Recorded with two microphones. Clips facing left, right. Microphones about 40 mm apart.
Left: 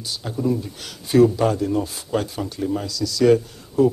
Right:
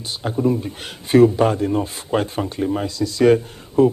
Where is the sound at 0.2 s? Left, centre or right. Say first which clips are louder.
Right 4 dB; right.